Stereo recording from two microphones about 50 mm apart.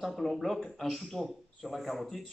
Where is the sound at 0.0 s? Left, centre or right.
Centre.